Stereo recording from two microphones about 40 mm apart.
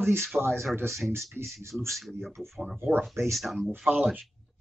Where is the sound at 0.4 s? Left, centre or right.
Right.